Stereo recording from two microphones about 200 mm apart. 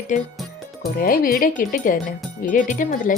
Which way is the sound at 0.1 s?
40° left (ahead or behind).